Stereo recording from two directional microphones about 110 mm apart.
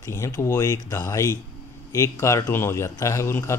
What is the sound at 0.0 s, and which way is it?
Speech, 25° left (ahead or behind).